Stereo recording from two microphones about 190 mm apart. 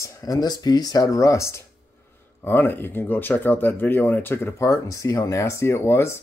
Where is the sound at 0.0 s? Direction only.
20° left (ahead or behind).